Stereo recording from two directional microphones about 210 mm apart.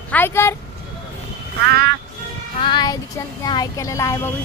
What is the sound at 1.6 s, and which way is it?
Speech, 50° right (ahead or behind).